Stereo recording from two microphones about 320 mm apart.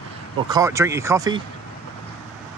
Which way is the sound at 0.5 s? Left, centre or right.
Centre.